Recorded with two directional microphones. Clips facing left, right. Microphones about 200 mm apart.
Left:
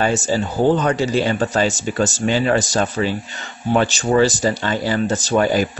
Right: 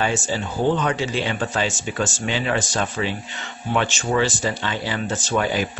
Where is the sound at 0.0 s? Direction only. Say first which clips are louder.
Left 5 dB; 40° left (ahead or behind).